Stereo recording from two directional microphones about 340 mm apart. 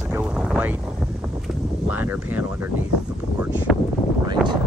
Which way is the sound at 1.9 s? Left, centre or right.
Centre.